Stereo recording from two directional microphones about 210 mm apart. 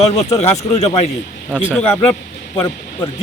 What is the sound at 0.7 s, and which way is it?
Speech, 30° left (ahead or behind).